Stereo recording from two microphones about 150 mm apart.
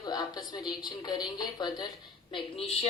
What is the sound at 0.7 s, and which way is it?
A woman's voice, 25° left (ahead or behind).